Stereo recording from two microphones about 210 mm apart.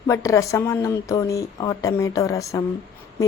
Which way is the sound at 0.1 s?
15° left (ahead or behind).